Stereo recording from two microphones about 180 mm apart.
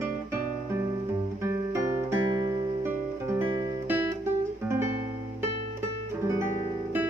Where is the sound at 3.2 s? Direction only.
10° right (ahead or behind).